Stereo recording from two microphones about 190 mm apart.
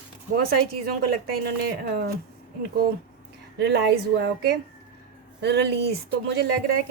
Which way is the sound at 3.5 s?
60° right (ahead or behind).